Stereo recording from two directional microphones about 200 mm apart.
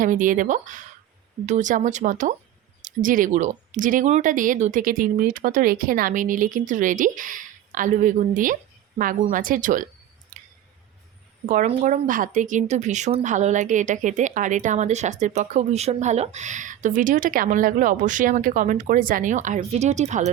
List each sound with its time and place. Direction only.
0.0 s speech: 40° right (ahead or behind)
10.3 s a sound: 40° right (ahead or behind)
11.4 s speech: 35° right (ahead or behind)